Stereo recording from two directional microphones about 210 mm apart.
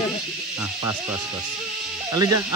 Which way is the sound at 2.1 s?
15° right (ahead or behind).